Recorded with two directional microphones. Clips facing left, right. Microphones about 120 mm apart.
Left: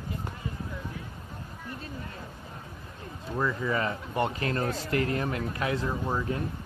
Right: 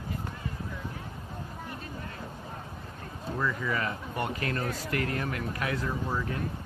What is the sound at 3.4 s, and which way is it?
Speech, 25° left (ahead or behind).